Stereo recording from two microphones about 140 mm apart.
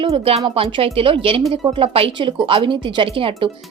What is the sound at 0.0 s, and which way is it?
A woman's voice, 45° right (ahead or behind).